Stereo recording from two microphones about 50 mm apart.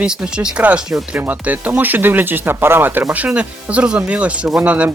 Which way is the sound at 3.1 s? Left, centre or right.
Right.